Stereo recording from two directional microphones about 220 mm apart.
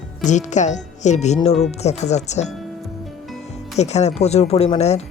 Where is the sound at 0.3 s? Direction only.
35° left (ahead or behind).